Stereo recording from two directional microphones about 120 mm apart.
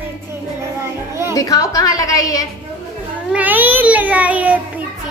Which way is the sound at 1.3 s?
30° left (ahead or behind).